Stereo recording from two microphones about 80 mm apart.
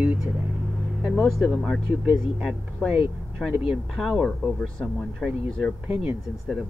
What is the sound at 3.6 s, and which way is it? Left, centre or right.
Speech, centre.